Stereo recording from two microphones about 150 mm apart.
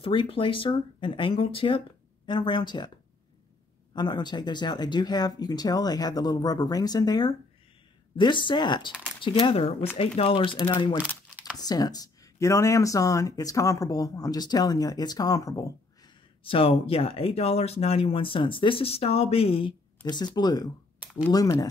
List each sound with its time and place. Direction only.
0.0 s speech: 35° left (ahead or behind)
3.9 s speech: 30° left (ahead or behind)
16.4 s speech: 35° left (ahead or behind)